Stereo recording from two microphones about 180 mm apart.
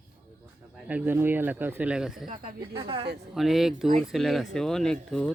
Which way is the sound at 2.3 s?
30° right (ahead or behind).